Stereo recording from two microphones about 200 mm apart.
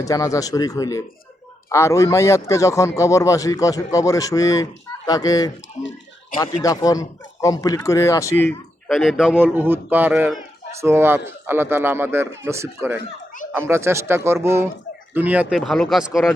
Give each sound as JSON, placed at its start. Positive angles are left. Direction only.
{"t": 0.1, "sound": "a man's voice", "side_deg": 15}
{"t": 8.9, "sound": "speech", "side_deg": 0}